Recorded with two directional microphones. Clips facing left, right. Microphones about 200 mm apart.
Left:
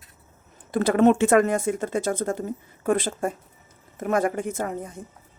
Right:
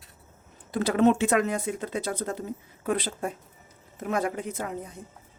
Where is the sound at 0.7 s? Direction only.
50° left (ahead or behind).